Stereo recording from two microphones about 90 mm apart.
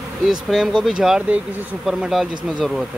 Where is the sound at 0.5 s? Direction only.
5° right (ahead or behind).